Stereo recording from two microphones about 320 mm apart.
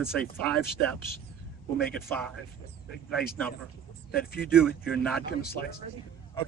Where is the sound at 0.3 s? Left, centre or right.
Centre.